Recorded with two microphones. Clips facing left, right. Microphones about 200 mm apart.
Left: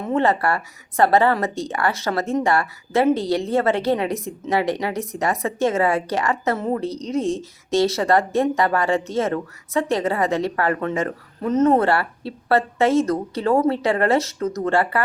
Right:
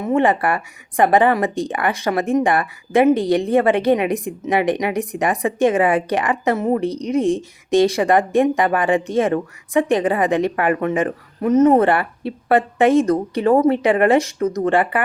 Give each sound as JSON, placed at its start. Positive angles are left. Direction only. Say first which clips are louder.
{"t": 0.0, "sound": "speech", "louder": "right 3 dB", "side_deg": -15}